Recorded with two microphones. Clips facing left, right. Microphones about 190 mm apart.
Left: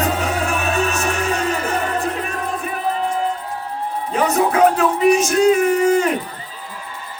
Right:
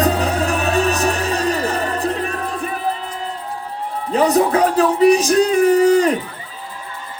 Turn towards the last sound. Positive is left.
turn(degrees=-35)  # may be behind; listen again after turning